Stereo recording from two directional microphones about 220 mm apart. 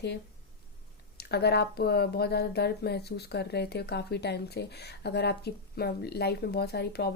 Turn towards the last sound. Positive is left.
turn(degrees=45)  # may be behind; listen again after turning